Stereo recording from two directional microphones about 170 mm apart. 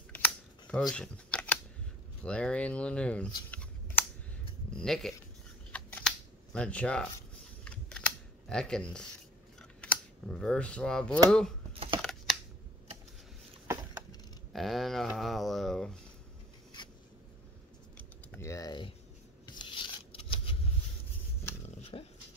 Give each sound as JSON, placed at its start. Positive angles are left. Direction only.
{"t": 0.1, "sound": "camera", "side_deg": 10}
{"t": 2.2, "sound": "speech", "side_deg": 5}
{"t": 4.7, "sound": "speech", "side_deg": 0}
{"t": 5.7, "sound": "camera", "side_deg": 5}
{"t": 7.6, "sound": "computer keyboard", "side_deg": 5}
{"t": 8.5, "sound": "speech", "side_deg": 5}
{"t": 9.6, "sound": "typing", "side_deg": 5}
{"t": 11.2, "sound": "speech", "side_deg": 5}
{"t": 11.7, "sound": "computer keyboard", "side_deg": -35}
{"t": 12.0, "sound": "computer keyboard", "side_deg": 5}
{"t": 14.5, "sound": "speech", "side_deg": 0}
{"t": 18.4, "sound": "typing", "side_deg": 20}
{"t": 19.4, "sound": "scissors", "side_deg": 30}
{"t": 21.6, "sound": "dog", "side_deg": 40}